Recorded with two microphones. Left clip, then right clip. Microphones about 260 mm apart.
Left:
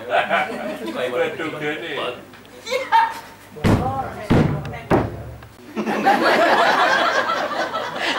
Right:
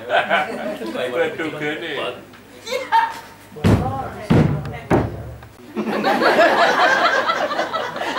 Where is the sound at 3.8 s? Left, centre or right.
Centre.